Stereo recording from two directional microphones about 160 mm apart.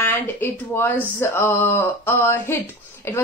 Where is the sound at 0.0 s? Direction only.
15° left (ahead or behind).